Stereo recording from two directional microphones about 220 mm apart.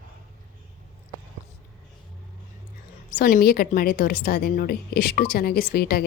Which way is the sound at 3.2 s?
40° left (ahead or behind).